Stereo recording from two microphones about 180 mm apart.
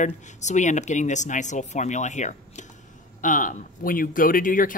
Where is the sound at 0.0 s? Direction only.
40° left (ahead or behind).